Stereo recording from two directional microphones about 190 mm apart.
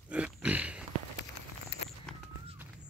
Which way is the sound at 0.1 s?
5° right (ahead or behind).